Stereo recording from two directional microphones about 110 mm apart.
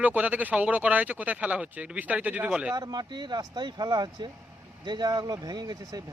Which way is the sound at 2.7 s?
35° right (ahead or behind).